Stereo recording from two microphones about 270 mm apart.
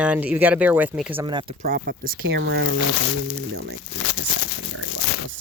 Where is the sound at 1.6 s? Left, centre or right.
Right.